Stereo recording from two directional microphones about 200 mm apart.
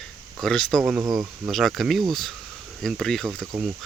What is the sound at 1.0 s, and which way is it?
Speech, 20° right (ahead or behind).